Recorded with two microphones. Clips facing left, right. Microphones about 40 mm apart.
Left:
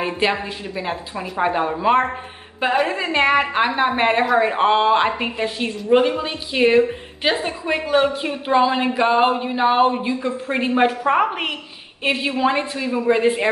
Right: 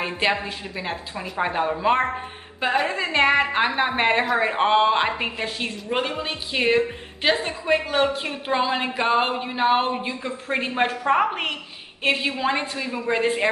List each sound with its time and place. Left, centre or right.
0.0 s a woman's voice: centre